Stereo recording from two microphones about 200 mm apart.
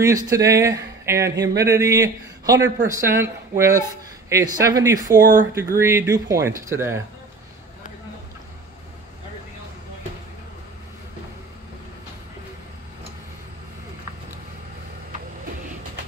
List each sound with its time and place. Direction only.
0.0 s speech: 15° right (ahead or behind)